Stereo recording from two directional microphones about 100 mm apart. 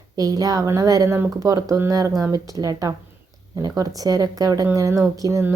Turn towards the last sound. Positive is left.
turn(degrees=-30)  # may be behind; listen again after turning